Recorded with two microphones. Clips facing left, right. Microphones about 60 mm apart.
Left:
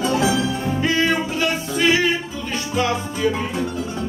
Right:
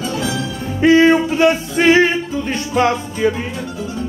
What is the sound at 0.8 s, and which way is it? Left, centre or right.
Music, centre.